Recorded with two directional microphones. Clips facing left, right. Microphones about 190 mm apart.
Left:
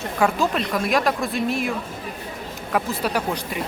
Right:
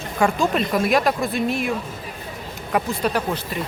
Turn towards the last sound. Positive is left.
turn(degrees=10)  # may be behind; listen again after turning